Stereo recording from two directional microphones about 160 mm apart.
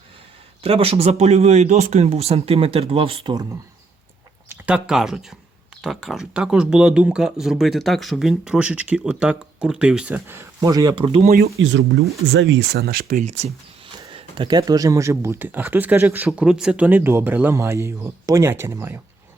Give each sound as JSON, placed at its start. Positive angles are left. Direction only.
{"t": 0.6, "sound": "speech", "side_deg": -35}
{"t": 4.4, "sound": "speech", "side_deg": -10}
{"t": 12.4, "sound": "speech", "side_deg": -90}
{"t": 13.2, "sound": "speech", "side_deg": -45}
{"t": 13.9, "sound": "speech", "side_deg": -30}